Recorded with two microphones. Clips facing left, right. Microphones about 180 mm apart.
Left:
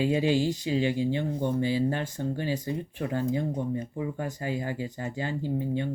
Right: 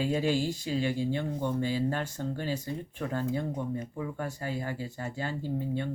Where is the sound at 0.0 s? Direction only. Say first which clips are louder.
Left 4 dB; 20° left (ahead or behind).